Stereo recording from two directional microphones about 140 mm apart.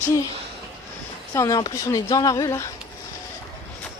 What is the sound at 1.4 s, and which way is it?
Speech, 25° left (ahead or behind).